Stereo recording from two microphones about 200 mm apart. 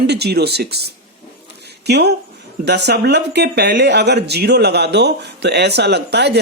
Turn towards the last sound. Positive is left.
turn(degrees=-55)  # may be behind; listen again after turning